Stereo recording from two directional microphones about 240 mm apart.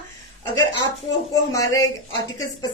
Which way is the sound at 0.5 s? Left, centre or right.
Centre.